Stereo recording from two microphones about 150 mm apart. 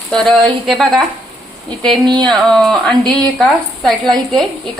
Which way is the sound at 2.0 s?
30° right (ahead or behind).